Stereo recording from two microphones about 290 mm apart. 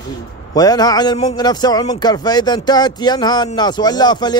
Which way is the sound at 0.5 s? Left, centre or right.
Centre.